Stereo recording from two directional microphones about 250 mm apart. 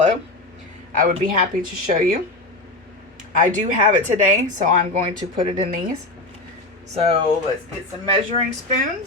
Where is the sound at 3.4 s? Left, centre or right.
Right.